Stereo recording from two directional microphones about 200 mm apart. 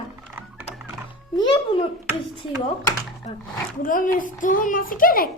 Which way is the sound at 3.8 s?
40° left (ahead or behind).